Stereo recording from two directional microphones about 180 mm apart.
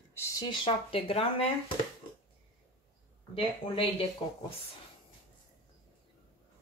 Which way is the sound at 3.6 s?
30° left (ahead or behind).